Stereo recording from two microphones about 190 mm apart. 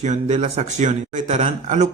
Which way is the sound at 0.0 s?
40° right (ahead or behind).